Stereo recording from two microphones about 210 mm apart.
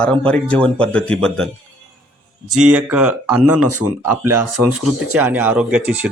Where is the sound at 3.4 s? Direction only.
90° right.